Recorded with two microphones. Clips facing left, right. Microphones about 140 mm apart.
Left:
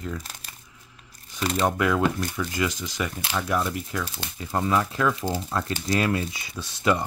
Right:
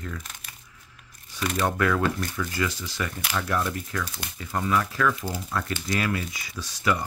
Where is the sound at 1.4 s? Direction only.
30° left (ahead or behind).